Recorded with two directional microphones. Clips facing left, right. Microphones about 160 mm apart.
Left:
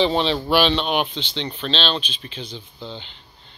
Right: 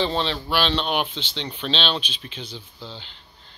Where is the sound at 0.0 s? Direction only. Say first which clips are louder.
Left 5 dB; 15° left (ahead or behind).